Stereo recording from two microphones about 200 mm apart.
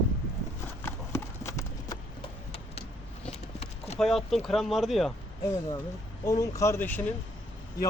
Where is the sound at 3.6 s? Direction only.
30° left (ahead or behind).